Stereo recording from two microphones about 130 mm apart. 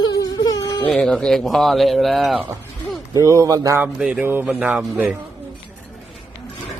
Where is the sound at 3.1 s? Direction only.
25° right (ahead or behind).